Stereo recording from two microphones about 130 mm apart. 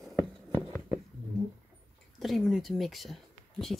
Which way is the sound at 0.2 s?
30° right (ahead or behind).